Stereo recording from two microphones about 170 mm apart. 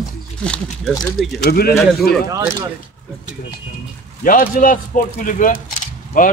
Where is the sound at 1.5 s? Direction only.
65° left (ahead or behind).